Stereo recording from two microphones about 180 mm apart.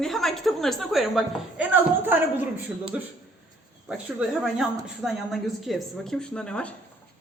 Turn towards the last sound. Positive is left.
turn(degrees=5)  # may be behind; listen again after turning